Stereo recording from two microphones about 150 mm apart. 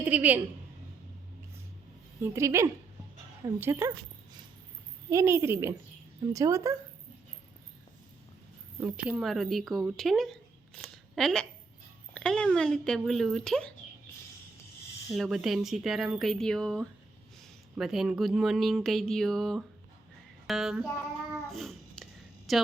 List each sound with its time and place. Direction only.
0.0 s a woman's voice: 10° right (ahead or behind)
2.2 s a woman's voice: 20° right (ahead or behind)
5.1 s a woman's voice: 20° right (ahead or behind)
8.8 s speech: 10° right (ahead or behind)
15.1 s speech: centre (ahead or behind)
21.5 s a sound: centre (ahead or behind)
22.5 s speech: centre (ahead or behind)